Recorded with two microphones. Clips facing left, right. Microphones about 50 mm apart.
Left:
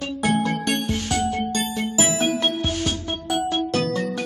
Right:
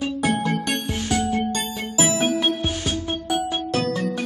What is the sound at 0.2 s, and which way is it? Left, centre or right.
Music, centre.